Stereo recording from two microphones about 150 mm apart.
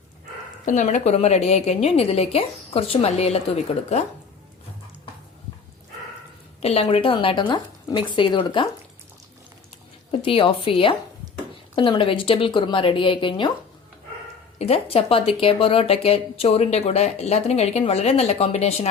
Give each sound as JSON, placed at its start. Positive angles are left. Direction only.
{"t": 0.6, "sound": "speech", "side_deg": 55}
{"t": 6.6, "sound": "speech", "side_deg": 45}
{"t": 10.1, "sound": "speech", "side_deg": 35}
{"t": 14.6, "sound": "speech", "side_deg": 40}